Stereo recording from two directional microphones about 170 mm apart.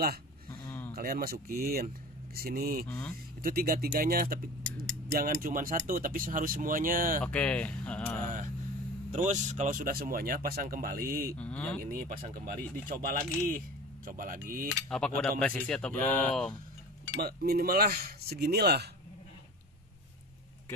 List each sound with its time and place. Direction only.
0.6 s a sound: 10° left (ahead or behind)
0.9 s speech: 60° right (ahead or behind)
7.2 s speech: 5° left (ahead or behind)
9.1 s speech: 45° right (ahead or behind)
11.3 s speech: 5° left (ahead or behind)
11.8 s speech: 55° right (ahead or behind)
14.9 s speech: 5° left (ahead or behind)
17.2 s speech: 65° right (ahead or behind)